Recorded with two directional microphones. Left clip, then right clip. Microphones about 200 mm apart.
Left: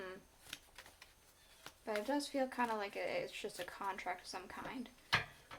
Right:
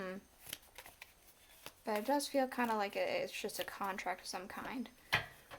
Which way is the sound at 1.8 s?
45° right (ahead or behind).